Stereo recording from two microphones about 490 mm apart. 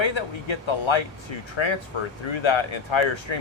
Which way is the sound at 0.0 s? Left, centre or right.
Left.